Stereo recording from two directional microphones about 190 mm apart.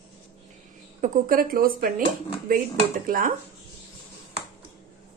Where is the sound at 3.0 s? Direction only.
45° right (ahead or behind).